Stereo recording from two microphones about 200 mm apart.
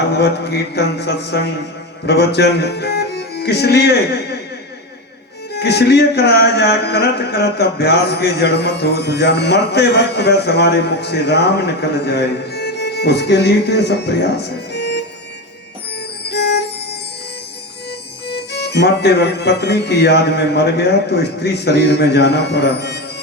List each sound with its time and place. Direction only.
0.2 s a man's voice: 55° left (ahead or behind)
5.5 s a man's voice: 55° left (ahead or behind)
16.2 s music: 55° left (ahead or behind)
18.3 s a man's voice: 55° left (ahead or behind)